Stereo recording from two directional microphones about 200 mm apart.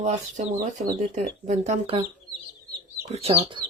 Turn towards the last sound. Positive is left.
turn(degrees=-30)  # may be behind; listen again after turning